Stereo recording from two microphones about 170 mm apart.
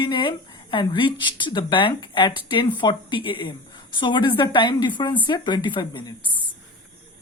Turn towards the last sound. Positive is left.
turn(degrees=25)  # may be behind; listen again after turning